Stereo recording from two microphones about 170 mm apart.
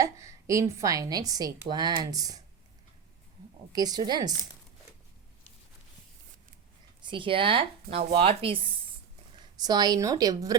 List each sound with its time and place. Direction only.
0.0 s speech: 15° right (ahead or behind)
3.7 s a woman's voice: 25° right (ahead or behind)
7.0 s a woman's voice: 30° right (ahead or behind)